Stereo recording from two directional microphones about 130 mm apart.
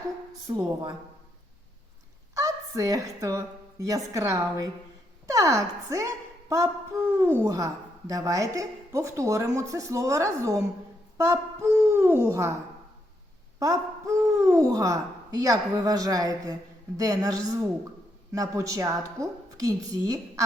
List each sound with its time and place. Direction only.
0.4 s a woman's voice: 35° right (ahead or behind)
2.3 s a woman's voice: 25° right (ahead or behind)
13.6 s a woman's voice: 25° right (ahead or behind)